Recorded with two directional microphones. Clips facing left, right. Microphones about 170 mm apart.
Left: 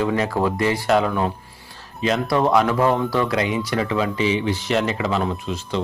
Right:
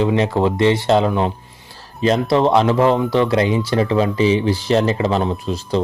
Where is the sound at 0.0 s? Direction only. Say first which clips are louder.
Right 4 dB; 25° right (ahead or behind).